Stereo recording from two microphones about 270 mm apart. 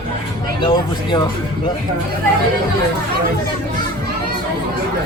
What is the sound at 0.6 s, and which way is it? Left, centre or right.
Speech, centre.